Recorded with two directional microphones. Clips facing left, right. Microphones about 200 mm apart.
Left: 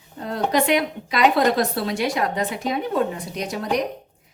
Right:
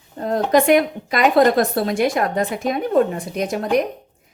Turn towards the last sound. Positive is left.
turn(degrees=-50)  # may be behind; listen again after turning